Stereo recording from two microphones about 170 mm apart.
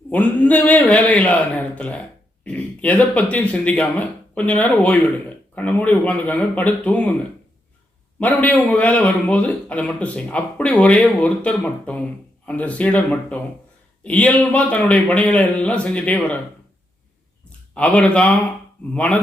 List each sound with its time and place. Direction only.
0.1 s a man's voice: 10° left (ahead or behind)
8.2 s a man's voice: 10° left (ahead or behind)
17.7 s a man's voice: 5° left (ahead or behind)